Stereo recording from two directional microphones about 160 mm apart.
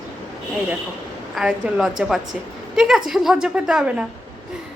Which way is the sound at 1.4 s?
5° right (ahead or behind).